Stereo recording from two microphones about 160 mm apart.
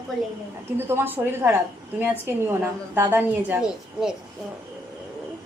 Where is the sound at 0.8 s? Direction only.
15° right (ahead or behind).